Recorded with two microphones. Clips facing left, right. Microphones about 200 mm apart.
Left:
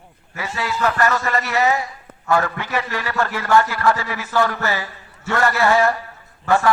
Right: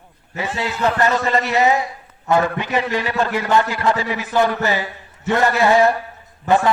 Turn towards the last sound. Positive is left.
turn(degrees=-20)  # may be behind; listen again after turning